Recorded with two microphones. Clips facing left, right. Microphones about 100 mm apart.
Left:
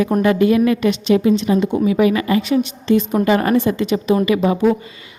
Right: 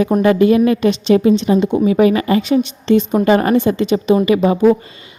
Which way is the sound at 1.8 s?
35° right (ahead or behind).